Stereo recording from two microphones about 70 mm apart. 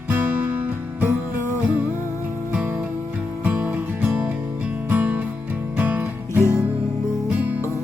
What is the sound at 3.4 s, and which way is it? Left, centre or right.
Music, right.